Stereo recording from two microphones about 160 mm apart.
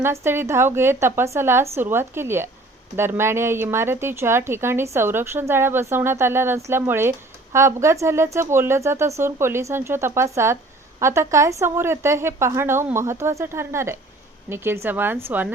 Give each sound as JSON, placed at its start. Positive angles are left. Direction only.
{"t": 0.0, "sound": "speech", "side_deg": -15}